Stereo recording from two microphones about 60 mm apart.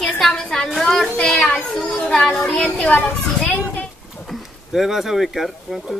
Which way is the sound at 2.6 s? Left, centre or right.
Centre.